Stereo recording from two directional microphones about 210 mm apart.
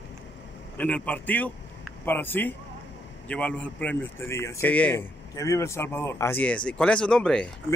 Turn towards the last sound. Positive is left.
turn(degrees=5)  # may be behind; listen again after turning